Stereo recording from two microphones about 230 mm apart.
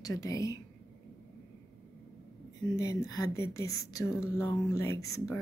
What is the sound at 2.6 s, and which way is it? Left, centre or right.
Speech, centre.